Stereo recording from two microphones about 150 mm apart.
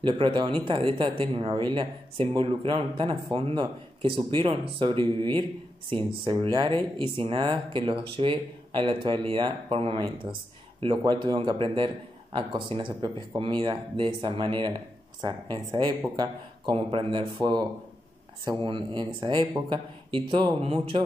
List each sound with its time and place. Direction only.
0.0 s speech: 35° right (ahead or behind)